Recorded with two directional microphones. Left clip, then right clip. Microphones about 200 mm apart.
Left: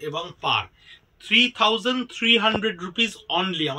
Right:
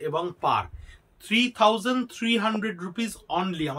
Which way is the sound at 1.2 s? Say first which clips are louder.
Left 3 dB; 10° right (ahead or behind).